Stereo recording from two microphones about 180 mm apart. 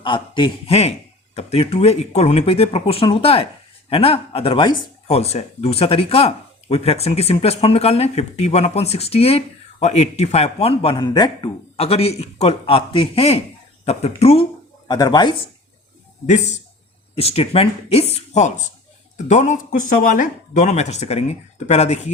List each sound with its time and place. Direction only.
0.0 s a man's voice: 25° left (ahead or behind)
14.8 s a man's voice: 20° left (ahead or behind)
16.2 s speech: 40° left (ahead or behind)